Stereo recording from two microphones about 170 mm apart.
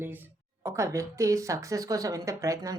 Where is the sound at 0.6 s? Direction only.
15° right (ahead or behind).